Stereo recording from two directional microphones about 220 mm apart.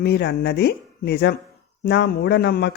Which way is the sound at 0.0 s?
45° left (ahead or behind).